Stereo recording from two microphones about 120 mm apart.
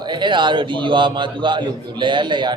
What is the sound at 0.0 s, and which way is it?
A man's voice, 40° right (ahead or behind).